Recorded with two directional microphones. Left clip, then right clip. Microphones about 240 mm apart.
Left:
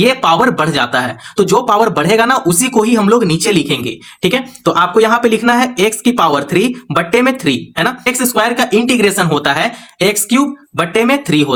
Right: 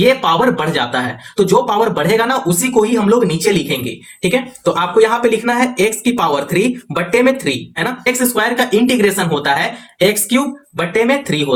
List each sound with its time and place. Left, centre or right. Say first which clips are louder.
0.0 s speech: left 2 dB; left